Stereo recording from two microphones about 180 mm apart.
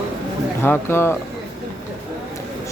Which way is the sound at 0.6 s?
10° left (ahead or behind).